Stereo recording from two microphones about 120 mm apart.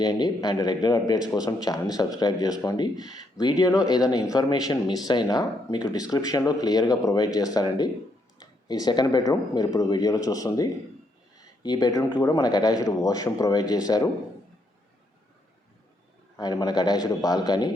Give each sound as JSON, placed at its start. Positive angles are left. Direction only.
{"t": 0.0, "sound": "speech", "side_deg": 35}
{"t": 11.3, "sound": "a sound", "side_deg": 35}
{"t": 12.1, "sound": "speech", "side_deg": 30}
{"t": 16.4, "sound": "speech", "side_deg": 35}